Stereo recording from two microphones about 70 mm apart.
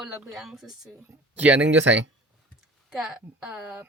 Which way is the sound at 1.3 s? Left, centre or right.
Right.